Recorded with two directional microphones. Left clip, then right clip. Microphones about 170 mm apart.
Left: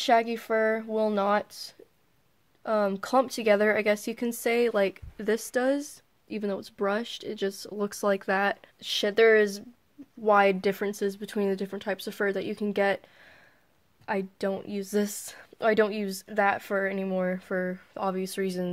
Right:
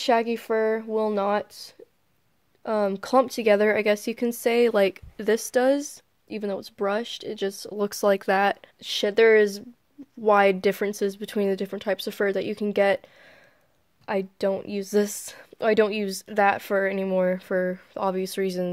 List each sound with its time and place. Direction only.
0.0 s speech: 35° right (ahead or behind)